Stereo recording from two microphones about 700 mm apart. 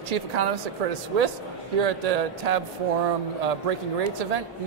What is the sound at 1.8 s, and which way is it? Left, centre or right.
Speech, right.